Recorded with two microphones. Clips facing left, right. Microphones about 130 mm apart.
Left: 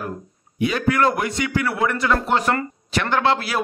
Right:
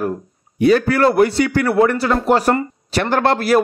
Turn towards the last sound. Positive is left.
turn(degrees=-45)  # may be behind; listen again after turning